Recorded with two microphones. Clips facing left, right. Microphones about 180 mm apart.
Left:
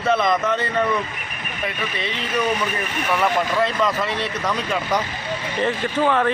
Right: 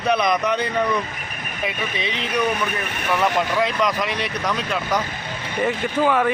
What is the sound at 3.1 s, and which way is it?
Speech, 10° right (ahead or behind).